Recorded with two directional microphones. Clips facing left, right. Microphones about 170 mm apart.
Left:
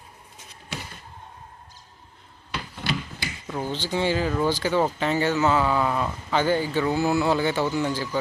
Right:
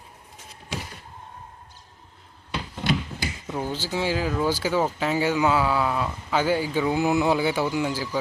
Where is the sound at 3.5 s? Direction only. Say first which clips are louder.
Left 1 dB; 10° right (ahead or behind).